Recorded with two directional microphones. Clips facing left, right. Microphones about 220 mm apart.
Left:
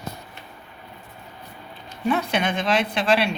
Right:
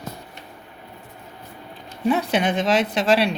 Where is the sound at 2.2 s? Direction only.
35° right (ahead or behind).